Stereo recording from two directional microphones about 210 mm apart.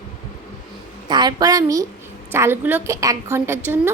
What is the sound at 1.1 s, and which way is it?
A woman's voice, 20° right (ahead or behind).